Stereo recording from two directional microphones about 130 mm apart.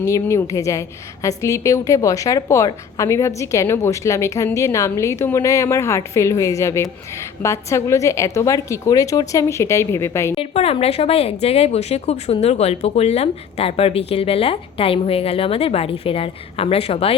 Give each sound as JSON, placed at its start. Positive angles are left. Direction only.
{"t": 0.0, "sound": "a woman's voice", "side_deg": 25}
{"t": 10.3, "sound": "speech", "side_deg": 50}